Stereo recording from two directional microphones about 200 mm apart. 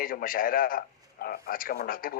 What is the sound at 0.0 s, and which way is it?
A man's voice, 45° left (ahead or behind).